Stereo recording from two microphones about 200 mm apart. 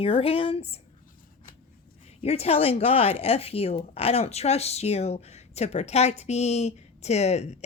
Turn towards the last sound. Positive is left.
turn(degrees=35)  # may be behind; listen again after turning